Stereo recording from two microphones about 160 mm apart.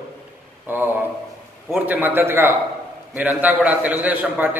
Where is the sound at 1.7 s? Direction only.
10° right (ahead or behind).